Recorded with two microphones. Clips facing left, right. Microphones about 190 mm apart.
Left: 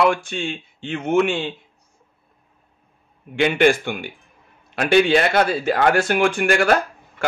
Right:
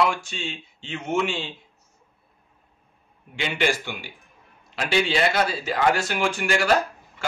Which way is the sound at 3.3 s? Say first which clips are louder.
Left 9 dB; 55° left (ahead or behind).